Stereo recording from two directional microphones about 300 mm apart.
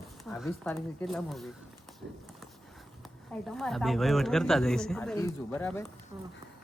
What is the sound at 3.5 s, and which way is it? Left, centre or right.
Speech, centre.